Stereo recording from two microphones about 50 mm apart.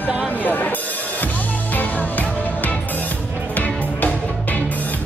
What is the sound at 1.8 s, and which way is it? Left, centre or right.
Music, left.